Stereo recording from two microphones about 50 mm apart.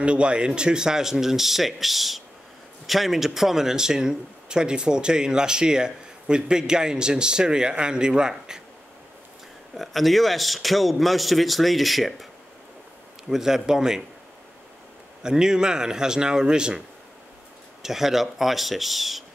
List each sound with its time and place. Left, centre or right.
0.0 s speech: right
9.8 s a man's voice: centre
13.3 s speech: centre
15.2 s speech: centre
17.8 s a man's voice: centre